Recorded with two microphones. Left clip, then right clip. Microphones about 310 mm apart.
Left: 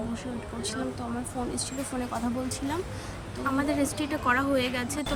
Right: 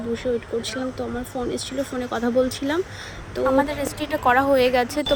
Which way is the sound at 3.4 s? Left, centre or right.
Centre.